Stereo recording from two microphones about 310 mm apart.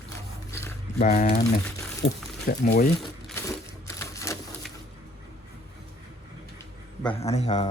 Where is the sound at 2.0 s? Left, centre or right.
Left.